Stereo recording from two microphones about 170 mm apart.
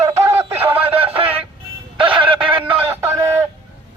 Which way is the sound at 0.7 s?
35° right (ahead or behind).